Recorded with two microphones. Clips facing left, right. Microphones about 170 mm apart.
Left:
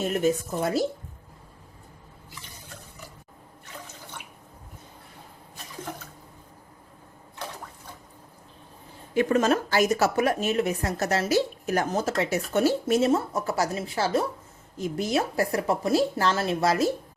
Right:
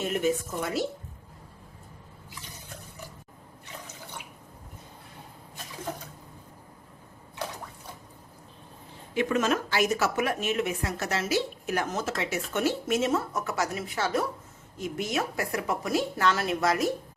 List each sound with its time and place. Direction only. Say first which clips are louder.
0.6 s speech: left 6 dB; 35° left (ahead or behind)
9.1 s speech: left 4 dB; 40° left (ahead or behind)